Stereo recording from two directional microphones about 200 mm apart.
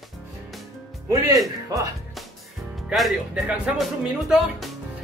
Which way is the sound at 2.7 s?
Centre (ahead or behind).